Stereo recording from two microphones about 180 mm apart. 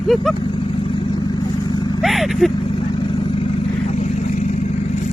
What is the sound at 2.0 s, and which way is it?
Speech, centre (ahead or behind).